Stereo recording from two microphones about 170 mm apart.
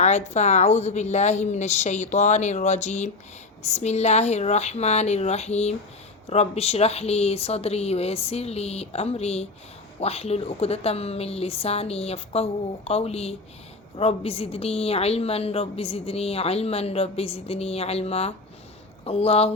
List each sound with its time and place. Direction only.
0.0 s a woman's voice: 45° left (ahead or behind)